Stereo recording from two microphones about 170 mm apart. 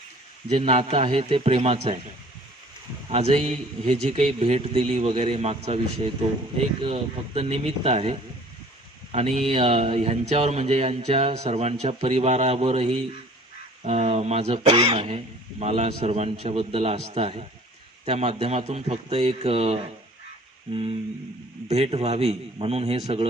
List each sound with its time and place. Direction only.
0.5 s speech: 35° right (ahead or behind)
3.1 s speech: 40° right (ahead or behind)
6.8 s speech: 35° right (ahead or behind)
21.6 s speech: 40° right (ahead or behind)